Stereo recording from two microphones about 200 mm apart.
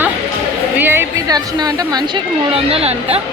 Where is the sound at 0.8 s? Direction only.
10° right (ahead or behind).